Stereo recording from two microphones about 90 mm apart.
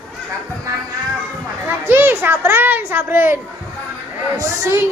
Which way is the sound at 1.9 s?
25° right (ahead or behind).